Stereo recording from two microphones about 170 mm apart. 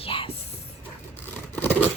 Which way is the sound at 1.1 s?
10° left (ahead or behind).